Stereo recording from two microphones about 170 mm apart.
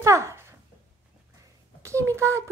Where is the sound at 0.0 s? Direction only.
15° right (ahead or behind).